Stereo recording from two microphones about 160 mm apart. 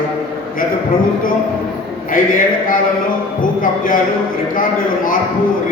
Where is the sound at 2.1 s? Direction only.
60° left (ahead or behind).